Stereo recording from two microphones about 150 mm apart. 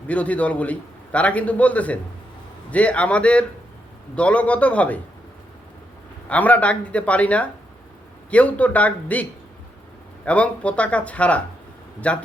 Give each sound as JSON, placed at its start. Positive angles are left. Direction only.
{"t": 0.1, "sound": "a man's voice", "side_deg": 10}
{"t": 6.2, "sound": "a man's voice", "side_deg": 10}
{"t": 10.2, "sound": "a man's voice", "side_deg": 10}